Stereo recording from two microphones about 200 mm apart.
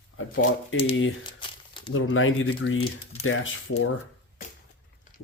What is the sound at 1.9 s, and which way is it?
Speech, 85° left.